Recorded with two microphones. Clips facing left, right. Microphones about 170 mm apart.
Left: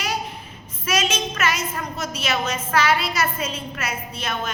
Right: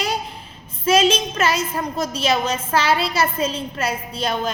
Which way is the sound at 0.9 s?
30° right (ahead or behind).